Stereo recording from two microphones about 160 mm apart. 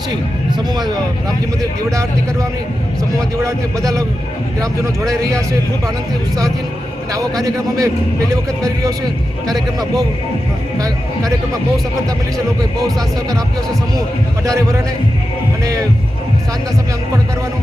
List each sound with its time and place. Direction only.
3.4 s a man's voice: 20° right (ahead or behind)
7.1 s a man's voice: 20° right (ahead or behind)